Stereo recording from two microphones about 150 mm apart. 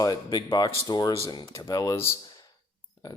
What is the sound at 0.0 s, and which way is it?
Speech, 30° left (ahead or behind).